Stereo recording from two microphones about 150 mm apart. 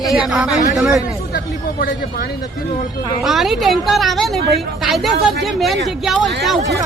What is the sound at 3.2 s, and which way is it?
Speech, centre (ahead or behind).